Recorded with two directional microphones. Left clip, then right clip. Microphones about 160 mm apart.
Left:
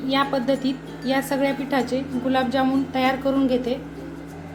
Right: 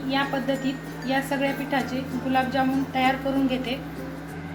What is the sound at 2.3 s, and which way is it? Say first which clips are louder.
Speech: left 2 dB; 40° left (ahead or behind).